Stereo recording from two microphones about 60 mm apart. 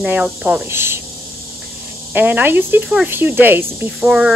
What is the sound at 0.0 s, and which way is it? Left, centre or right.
Speech, right.